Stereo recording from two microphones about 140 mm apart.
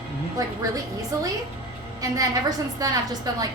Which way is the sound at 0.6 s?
25° right (ahead or behind).